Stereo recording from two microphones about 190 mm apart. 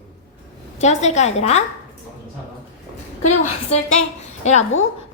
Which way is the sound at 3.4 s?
35° left (ahead or behind).